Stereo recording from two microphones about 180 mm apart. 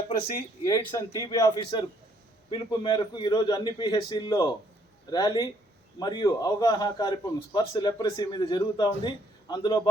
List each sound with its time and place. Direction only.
0.6 s a man's voice: 20° left (ahead or behind)